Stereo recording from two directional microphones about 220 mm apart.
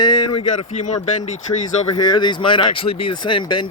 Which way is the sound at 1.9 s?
20° left (ahead or behind).